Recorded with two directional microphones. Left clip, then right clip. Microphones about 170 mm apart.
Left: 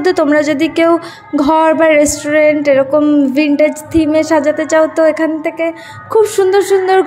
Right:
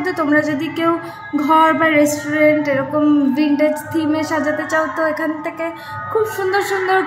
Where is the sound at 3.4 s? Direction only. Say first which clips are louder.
Left 5 dB; 40° left (ahead or behind).